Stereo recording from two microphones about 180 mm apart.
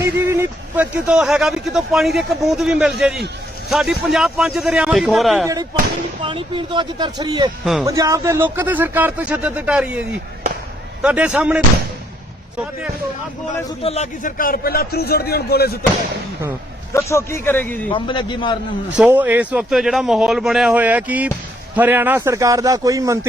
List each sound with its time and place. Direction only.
0.0 s speech: 15° right (ahead or behind)
6.2 s speech: 30° right (ahead or behind)
7.6 s speech: centre (ahead or behind)
7.9 s a man's voice: 15° right (ahead or behind)
13.8 s a man's voice: 35° left (ahead or behind); by 15.8 s 60° left (ahead or behind)
16.9 s a man's voice: 15° left (ahead or behind)
17.9 s a man's voice: 25° left (ahead or behind)
18.9 s a man's voice: 10° right (ahead or behind)